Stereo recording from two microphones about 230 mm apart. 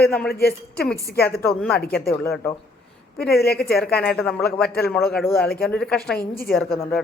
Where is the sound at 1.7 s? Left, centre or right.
Left.